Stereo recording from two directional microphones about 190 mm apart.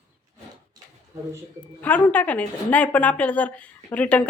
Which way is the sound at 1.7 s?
10° left (ahead or behind).